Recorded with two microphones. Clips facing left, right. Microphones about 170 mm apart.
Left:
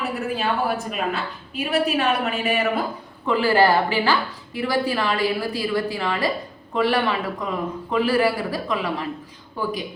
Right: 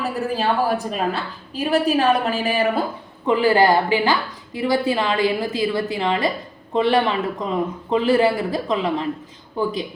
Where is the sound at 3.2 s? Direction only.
15° right (ahead or behind).